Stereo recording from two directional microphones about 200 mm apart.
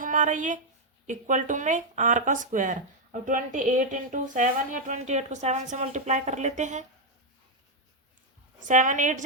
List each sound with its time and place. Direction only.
0.0 s speech: 40° right (ahead or behind)
8.6 s speech: 40° right (ahead or behind)